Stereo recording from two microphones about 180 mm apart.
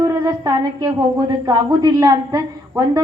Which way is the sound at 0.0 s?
20° right (ahead or behind).